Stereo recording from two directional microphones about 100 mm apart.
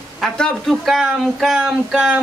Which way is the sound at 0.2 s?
5° left (ahead or behind).